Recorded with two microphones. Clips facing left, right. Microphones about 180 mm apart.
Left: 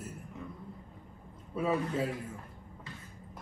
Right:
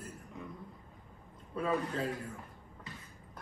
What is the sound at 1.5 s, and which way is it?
Speech, 5° left (ahead or behind).